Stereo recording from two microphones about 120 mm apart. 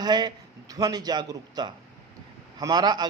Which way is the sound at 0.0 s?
35° right (ahead or behind).